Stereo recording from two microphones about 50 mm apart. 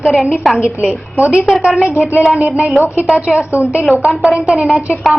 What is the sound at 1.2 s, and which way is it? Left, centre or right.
Speech, right.